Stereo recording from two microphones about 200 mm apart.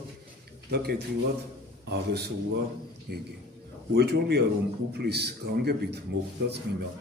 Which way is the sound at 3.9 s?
55° right (ahead or behind).